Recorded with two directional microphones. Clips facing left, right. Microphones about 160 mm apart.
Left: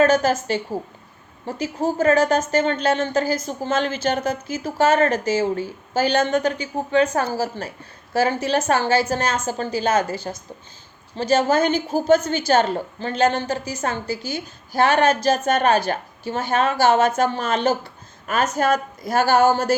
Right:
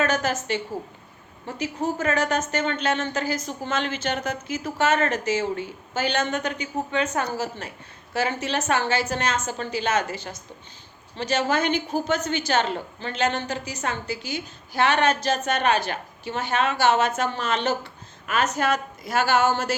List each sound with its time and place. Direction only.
0.0 s a woman's voice: 35° left (ahead or behind)
11.2 s a woman's voice: 40° left (ahead or behind)